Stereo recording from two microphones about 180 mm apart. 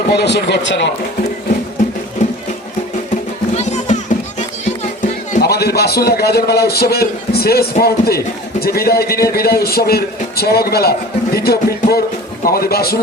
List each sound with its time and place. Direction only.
0.1 s speech: 65° left (ahead or behind)
3.5 s music: 40° left (ahead or behind)
5.4 s a man's voice: 65° left (ahead or behind)